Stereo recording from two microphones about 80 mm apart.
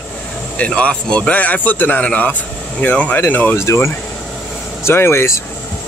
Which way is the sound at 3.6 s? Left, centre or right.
Left.